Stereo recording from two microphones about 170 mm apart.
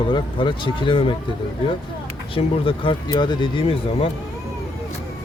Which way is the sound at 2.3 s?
30° left (ahead or behind).